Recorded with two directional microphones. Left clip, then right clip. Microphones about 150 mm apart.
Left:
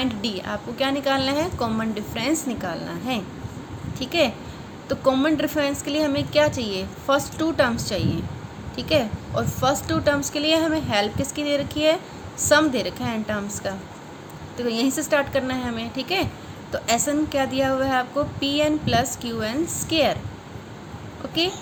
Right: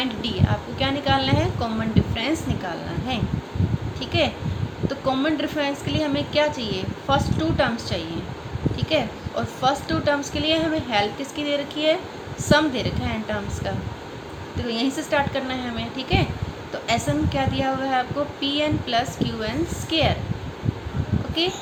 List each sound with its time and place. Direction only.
0.0 s a woman's voice: 45° left (ahead or behind)
21.4 s a woman's voice: 55° left (ahead or behind)